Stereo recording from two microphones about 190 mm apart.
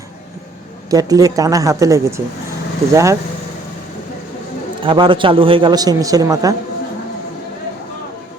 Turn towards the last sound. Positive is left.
turn(degrees=-20)  # may be behind; listen again after turning